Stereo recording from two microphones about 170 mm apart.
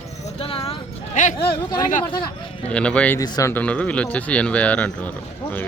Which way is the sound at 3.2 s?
20° left (ahead or behind).